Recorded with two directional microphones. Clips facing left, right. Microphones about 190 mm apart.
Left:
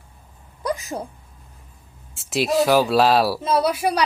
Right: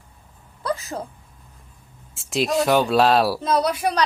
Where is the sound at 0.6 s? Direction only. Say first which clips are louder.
Left 1 dB; 15° left (ahead or behind).